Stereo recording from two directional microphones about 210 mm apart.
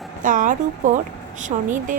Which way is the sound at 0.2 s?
40° right (ahead or behind).